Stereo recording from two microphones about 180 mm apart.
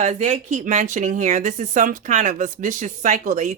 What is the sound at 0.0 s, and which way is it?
Speech, 40° right (ahead or behind).